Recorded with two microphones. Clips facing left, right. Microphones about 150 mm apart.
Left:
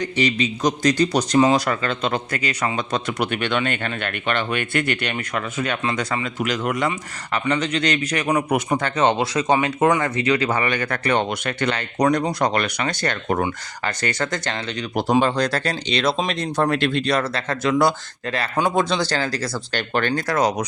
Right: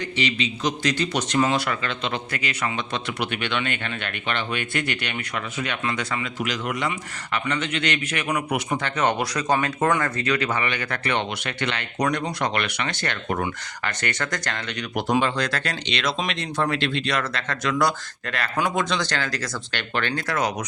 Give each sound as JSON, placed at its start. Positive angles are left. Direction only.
{"t": 0.2, "sound": "speech", "side_deg": 45}
{"t": 9.0, "sound": "speech", "side_deg": 25}